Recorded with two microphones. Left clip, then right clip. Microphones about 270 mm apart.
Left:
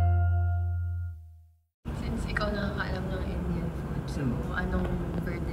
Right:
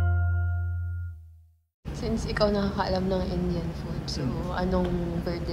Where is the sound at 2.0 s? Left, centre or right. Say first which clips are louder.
Right 7 dB; centre.